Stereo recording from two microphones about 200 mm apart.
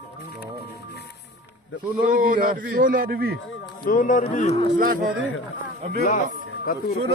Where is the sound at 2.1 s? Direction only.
45° right (ahead or behind).